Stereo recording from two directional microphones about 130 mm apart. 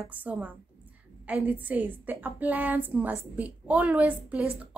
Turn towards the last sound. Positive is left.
turn(degrees=-10)  # may be behind; listen again after turning